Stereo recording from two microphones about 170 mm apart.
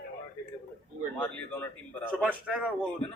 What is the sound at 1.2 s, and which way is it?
Speech, 10° left (ahead or behind).